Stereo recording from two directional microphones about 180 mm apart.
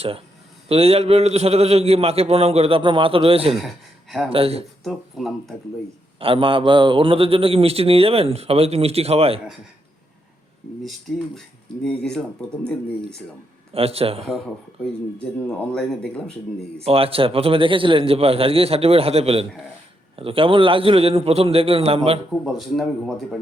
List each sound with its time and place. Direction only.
0.7 s a man's voice: 35° right (ahead or behind)
4.8 s speech: centre (ahead or behind)
6.1 s a man's voice: 30° right (ahead or behind)
11.8 s speech: 5° left (ahead or behind)
13.7 s a man's voice: 35° right (ahead or behind)
15.2 s speech: 5° left (ahead or behind)
16.8 s a man's voice: 30° right (ahead or behind)
22.4 s speech: centre (ahead or behind)